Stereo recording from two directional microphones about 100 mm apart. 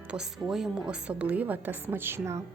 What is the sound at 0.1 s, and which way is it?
Speech, 5° right (ahead or behind).